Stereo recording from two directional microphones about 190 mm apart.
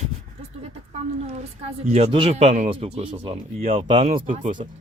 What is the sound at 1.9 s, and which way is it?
Speech, 30° right (ahead or behind).